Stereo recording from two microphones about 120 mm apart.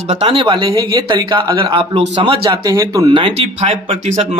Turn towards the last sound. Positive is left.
turn(degrees=-60)  # may be behind; listen again after turning